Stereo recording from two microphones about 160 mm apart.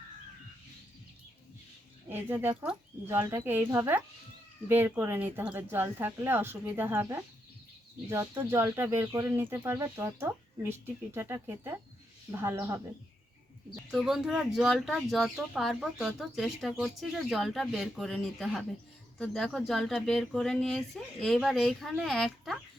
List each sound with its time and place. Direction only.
2.0 s speech: 15° right (ahead or behind)
13.9 s speech: centre (ahead or behind)